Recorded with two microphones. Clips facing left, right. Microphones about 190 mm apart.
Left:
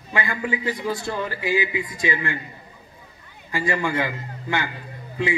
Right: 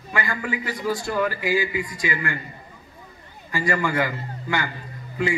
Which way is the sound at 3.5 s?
20° left (ahead or behind).